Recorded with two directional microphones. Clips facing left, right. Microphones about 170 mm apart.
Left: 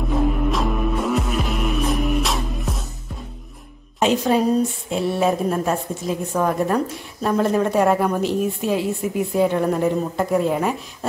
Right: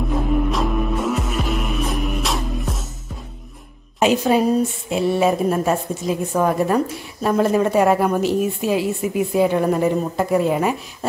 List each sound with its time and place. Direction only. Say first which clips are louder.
0.1 s music: left 1 dB; centre (ahead or behind)
4.0 s a woman's voice: right 2 dB; 5° right (ahead or behind)